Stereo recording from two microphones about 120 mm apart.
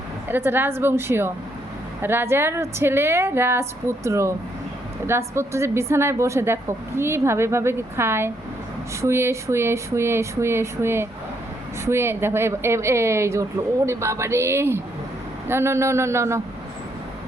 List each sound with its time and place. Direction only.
0.3 s a woman's voice: 15° right (ahead or behind)